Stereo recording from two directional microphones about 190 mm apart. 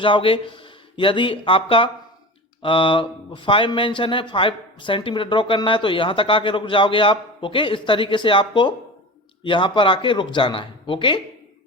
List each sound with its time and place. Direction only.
0.0 s speech: 30° left (ahead or behind)